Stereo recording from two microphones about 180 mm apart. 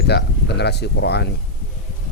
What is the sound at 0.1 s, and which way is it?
Speech, 65° left (ahead or behind).